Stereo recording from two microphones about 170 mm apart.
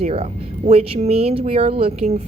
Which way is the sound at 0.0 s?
35° right (ahead or behind).